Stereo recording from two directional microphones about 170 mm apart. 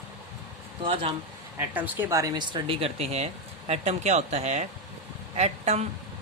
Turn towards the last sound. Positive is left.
turn(degrees=-40)  # may be behind; listen again after turning